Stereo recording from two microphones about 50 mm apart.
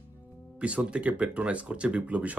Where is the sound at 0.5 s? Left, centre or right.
Right.